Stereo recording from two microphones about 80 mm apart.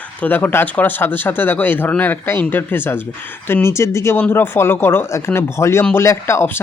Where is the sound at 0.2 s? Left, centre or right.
Left.